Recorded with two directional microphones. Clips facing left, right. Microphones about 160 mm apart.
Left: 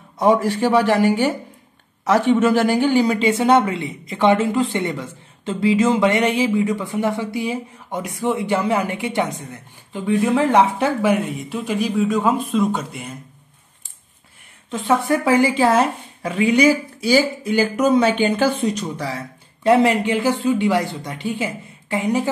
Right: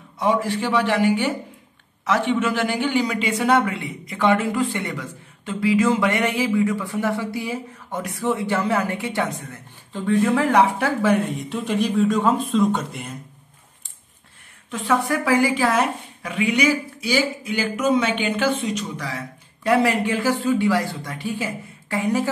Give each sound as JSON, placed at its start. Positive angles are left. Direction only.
{"t": 0.2, "sound": "a man's voice", "side_deg": 45}
{"t": 11.2, "sound": "speech", "side_deg": 5}
{"t": 14.7, "sound": "speech", "side_deg": 25}